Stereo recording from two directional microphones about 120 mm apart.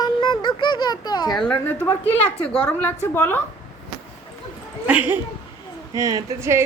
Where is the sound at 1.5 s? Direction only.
15° left (ahead or behind).